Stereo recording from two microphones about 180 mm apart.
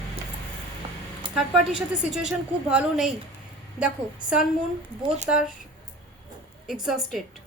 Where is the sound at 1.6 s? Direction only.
5° right (ahead or behind).